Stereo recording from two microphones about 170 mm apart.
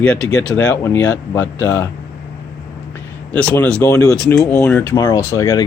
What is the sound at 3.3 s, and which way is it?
Speech, 10° left (ahead or behind).